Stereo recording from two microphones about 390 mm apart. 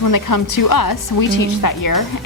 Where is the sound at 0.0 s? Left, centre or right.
Left.